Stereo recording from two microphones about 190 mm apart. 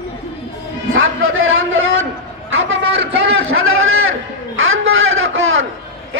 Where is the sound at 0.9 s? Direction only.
90° right.